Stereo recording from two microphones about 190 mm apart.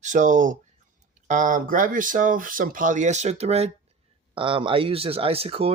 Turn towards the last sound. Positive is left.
turn(degrees=-30)  # may be behind; listen again after turning